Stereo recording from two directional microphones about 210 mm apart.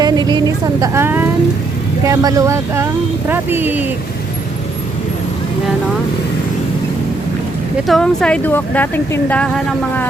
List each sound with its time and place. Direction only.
0.0 s speech: 20° right (ahead or behind)
7.9 s speech: centre (ahead or behind)